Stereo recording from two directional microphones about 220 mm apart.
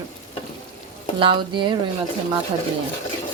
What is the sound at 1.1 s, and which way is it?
Speech, 25° right (ahead or behind).